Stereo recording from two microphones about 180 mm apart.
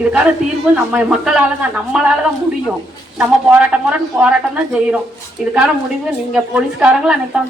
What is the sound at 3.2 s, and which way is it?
Speech, 5° right (ahead or behind).